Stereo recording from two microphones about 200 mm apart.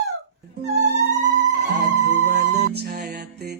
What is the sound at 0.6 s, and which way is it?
Music, 35° right (ahead or behind).